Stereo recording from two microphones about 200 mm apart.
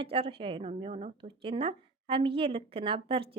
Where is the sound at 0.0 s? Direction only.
25° right (ahead or behind).